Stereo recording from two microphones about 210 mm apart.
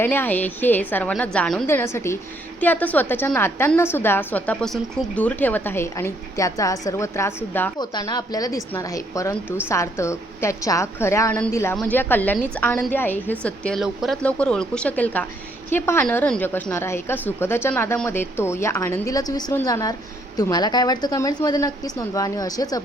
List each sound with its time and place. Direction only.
0.0 s a woman's voice: 10° left (ahead or behind)